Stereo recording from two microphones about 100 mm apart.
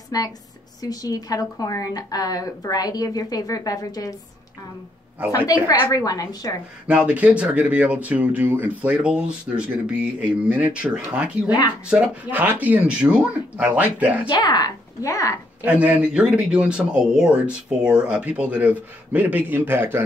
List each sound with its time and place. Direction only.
0.1 s a woman's voice: 40° left (ahead or behind)
5.4 s speech: 20° right (ahead or behind)
5.7 s a woman's voice: 40° left (ahead or behind)
6.9 s speech: 15° right (ahead or behind)
14.3 s a woman's voice: 45° left (ahead or behind)
15.6 s speech: 15° right (ahead or behind)